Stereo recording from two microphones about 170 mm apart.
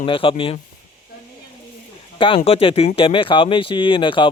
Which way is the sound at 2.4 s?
35° left (ahead or behind).